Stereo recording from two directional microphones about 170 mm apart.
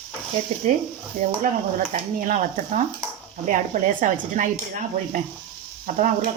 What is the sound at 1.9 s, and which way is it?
Speech, 50° right (ahead or behind).